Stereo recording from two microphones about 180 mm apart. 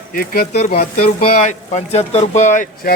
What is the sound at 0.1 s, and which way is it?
Speech, 55° left (ahead or behind).